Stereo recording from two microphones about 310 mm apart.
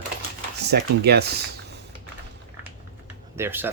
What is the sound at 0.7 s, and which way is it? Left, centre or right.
Speech, right.